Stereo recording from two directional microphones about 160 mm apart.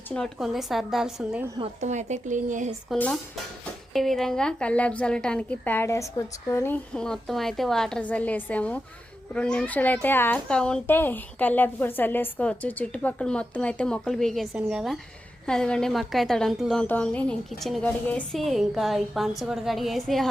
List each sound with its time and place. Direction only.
0.1 s a woman's voice: centre (ahead or behind)
1.8 s speech: 45° right (ahead or behind)
2.9 s a child's voice: 5° left (ahead or behind)
6.9 s a woman's voice: 5° left (ahead or behind)